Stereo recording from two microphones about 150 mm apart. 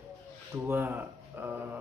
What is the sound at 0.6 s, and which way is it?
Speech, 15° right (ahead or behind).